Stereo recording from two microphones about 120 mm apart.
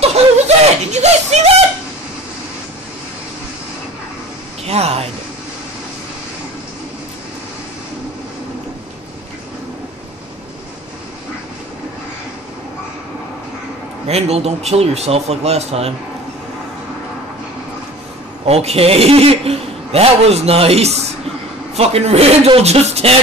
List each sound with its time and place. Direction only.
0.0 s snicker: 60° right (ahead or behind)
4.6 s a man's voice: 60° right (ahead or behind)
14.0 s speech: 60° right (ahead or behind)
18.4 s a man's voice: 60° right (ahead or behind)